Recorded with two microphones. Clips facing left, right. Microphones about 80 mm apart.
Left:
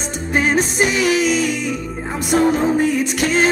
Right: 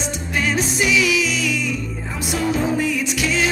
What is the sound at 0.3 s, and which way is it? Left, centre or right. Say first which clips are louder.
Music: left 5 dB; left.